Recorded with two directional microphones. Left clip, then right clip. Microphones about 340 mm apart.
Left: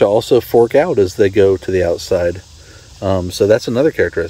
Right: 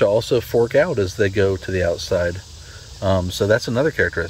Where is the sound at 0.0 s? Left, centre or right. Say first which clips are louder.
Left 5 dB; centre.